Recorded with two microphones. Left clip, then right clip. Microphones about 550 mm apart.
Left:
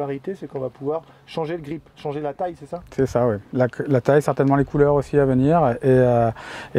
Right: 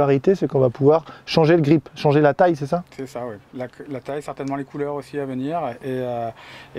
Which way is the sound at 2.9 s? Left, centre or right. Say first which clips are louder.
Left 11 dB; left.